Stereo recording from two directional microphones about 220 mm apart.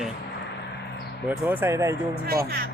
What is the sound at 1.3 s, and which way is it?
Speech, 10° right (ahead or behind).